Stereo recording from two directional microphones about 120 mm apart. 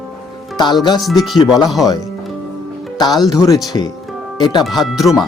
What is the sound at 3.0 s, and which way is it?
Speech, 35° left (ahead or behind).